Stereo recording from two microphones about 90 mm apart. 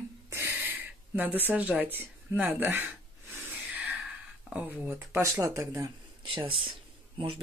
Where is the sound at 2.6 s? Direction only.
20° right (ahead or behind).